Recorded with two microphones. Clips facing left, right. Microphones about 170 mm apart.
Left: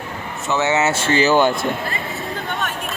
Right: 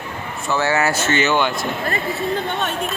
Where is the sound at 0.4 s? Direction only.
20° left (ahead or behind); by 1.5 s 40° left (ahead or behind).